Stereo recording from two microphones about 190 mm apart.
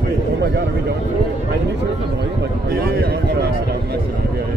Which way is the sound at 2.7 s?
50° right (ahead or behind).